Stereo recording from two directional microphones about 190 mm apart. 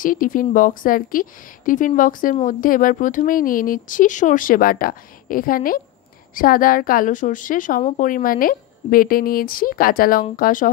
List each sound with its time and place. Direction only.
0.0 s a woman's voice: 45° left (ahead or behind)